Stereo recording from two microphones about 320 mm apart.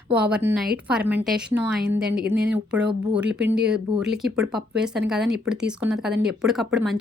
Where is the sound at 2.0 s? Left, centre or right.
Right.